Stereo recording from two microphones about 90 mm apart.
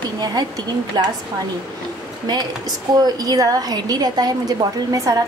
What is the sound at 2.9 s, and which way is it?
A woman's voice, 50° right (ahead or behind).